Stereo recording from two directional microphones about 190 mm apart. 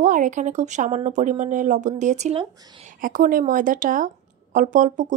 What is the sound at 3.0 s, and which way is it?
A woman's voice, 45° right (ahead or behind).